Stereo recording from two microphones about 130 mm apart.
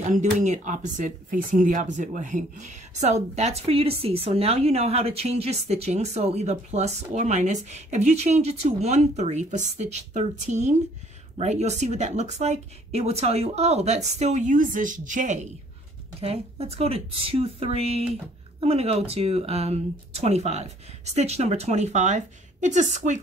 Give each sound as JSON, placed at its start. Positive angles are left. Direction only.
{"t": 0.0, "sound": "speech", "side_deg": -70}
{"t": 16.2, "sound": "a woman's voice", "side_deg": -50}